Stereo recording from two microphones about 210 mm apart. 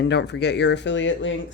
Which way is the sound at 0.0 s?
55° left (ahead or behind).